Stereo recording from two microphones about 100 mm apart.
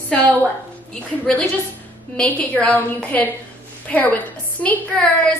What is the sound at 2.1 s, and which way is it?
A woman's voice, 15° left (ahead or behind).